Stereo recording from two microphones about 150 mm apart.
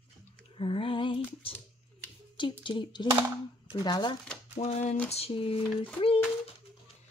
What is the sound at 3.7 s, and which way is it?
Speech, 30° left (ahead or behind).